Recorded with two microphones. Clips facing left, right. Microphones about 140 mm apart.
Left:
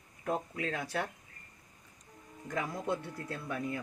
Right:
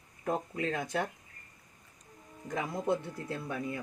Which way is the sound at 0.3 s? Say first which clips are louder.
Right 2 dB; 20° right (ahead or behind).